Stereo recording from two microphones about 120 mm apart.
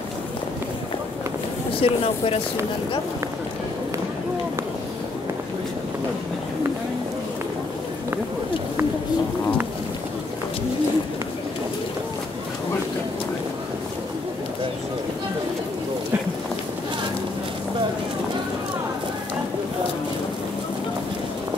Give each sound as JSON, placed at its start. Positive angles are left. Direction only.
{"t": 1.8, "sound": "speech", "side_deg": 50}